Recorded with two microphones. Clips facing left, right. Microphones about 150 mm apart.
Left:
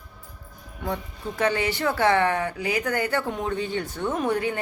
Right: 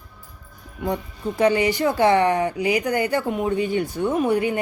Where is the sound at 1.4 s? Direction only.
15° right (ahead or behind).